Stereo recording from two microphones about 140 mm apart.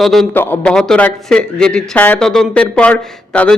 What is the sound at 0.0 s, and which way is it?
Speech, centre (ahead or behind).